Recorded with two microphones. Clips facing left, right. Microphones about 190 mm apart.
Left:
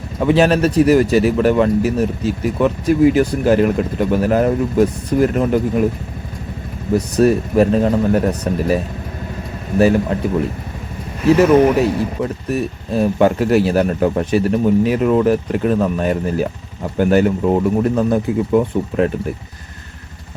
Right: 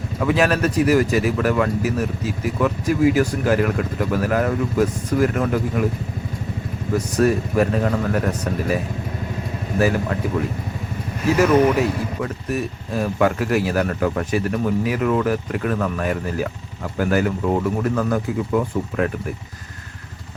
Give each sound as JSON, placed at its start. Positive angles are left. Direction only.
{"t": 0.2, "sound": "speech", "side_deg": 25}
{"t": 7.2, "sound": "speech", "side_deg": 25}
{"t": 12.2, "sound": "speech", "side_deg": 25}